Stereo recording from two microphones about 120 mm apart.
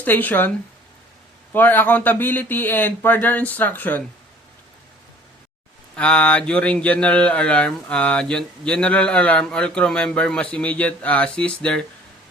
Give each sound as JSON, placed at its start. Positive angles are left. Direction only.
{"t": 0.0, "sound": "speech", "side_deg": 15}
{"t": 1.5, "sound": "speech", "side_deg": 15}
{"t": 6.0, "sound": "speech", "side_deg": 10}